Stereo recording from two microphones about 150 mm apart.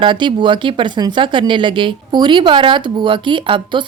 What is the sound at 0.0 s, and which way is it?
Speech, 30° right (ahead or behind).